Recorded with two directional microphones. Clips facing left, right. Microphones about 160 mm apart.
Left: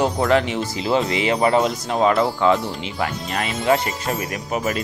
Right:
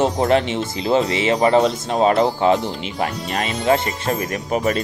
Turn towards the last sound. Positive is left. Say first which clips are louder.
# right 3 dB
turn(degrees=-30)  # may be behind; listen again after turning